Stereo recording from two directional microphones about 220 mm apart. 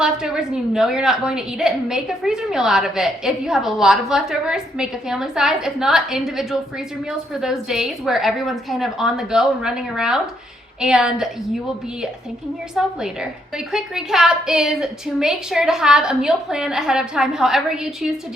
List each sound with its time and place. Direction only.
0.0 s a woman's voice: 5° right (ahead or behind)
12.8 s a woman's voice: 5° right (ahead or behind)